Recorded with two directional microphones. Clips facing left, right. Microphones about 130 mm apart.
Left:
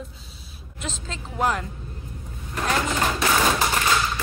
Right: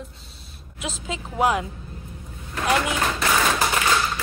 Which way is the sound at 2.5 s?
Centre (ahead or behind).